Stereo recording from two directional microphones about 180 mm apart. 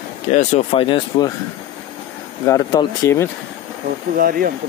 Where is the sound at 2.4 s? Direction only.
20° left (ahead or behind).